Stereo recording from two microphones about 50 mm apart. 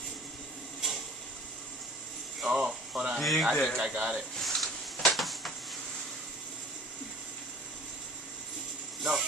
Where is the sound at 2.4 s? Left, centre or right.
Centre.